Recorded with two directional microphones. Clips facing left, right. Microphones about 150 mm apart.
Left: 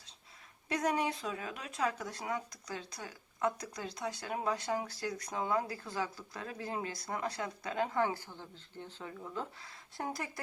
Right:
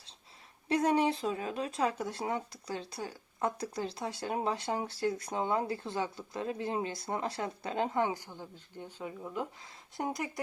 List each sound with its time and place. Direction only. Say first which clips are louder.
0.7 s speech: right 5 dB; 30° right (ahead or behind)